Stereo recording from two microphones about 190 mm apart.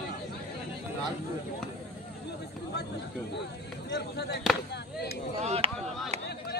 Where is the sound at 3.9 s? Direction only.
60° left (ahead or behind).